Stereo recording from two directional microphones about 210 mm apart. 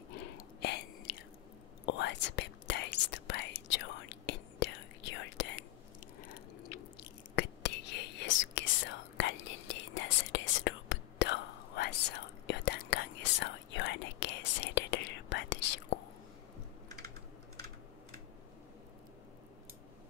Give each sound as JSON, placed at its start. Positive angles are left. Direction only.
{"t": 0.6, "sound": "a sound", "side_deg": 50}
{"t": 1.9, "sound": "whispering", "side_deg": 55}
{"t": 7.3, "sound": "whispering", "side_deg": 55}